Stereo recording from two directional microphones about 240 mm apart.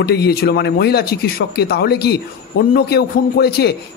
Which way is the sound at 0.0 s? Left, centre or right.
Left.